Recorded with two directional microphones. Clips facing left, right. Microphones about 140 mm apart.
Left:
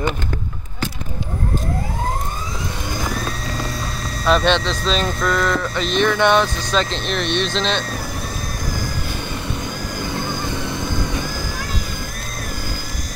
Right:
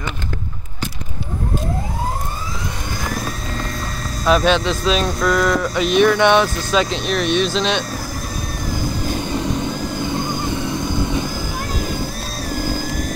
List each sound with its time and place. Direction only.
4.2 s speech: 5° right (ahead or behind)
5.0 s a sound: centre (ahead or behind)
5.5 s speech: 10° right (ahead or behind)
12.5 s vehicle: 45° right (ahead or behind)